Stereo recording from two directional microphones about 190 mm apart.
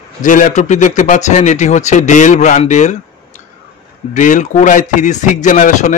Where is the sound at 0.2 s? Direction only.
40° left (ahead or behind).